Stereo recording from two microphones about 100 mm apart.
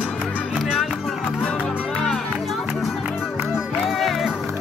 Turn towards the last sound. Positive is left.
turn(degrees=0)  # may be behind; listen again after turning